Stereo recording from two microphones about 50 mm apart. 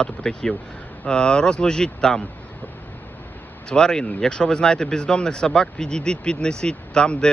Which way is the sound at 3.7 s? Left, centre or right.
Centre.